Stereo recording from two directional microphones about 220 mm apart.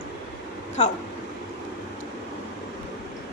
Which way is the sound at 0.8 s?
30° left (ahead or behind).